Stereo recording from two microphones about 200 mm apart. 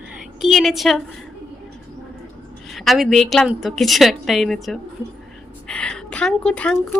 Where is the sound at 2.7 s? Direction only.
Centre (ahead or behind).